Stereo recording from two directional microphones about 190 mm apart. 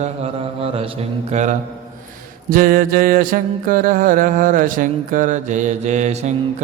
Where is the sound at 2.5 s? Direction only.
50° right (ahead or behind).